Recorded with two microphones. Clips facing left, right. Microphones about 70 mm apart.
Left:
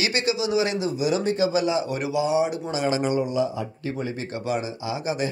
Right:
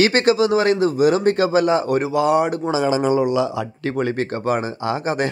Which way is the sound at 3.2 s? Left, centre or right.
Right.